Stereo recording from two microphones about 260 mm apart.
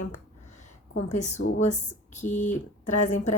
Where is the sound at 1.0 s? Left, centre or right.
Left.